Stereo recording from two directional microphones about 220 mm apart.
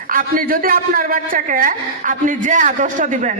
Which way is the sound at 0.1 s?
40° right (ahead or behind).